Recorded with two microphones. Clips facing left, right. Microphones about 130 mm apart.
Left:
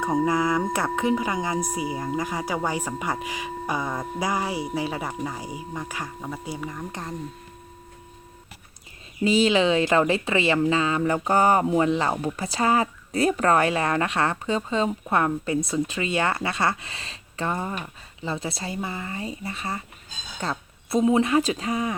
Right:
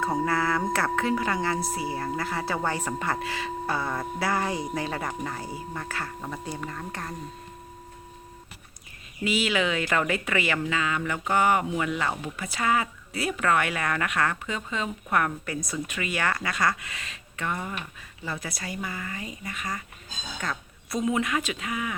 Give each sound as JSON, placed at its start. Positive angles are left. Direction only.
{"t": 0.0, "sound": "speech", "side_deg": 15}
{"t": 9.2, "sound": "speech", "side_deg": 35}